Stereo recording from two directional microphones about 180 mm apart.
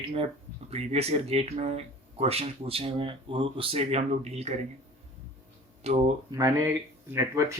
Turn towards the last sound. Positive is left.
turn(degrees=-15)  # may be behind; listen again after turning